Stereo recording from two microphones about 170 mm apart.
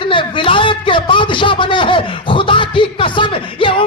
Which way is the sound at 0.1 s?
30° left (ahead or behind).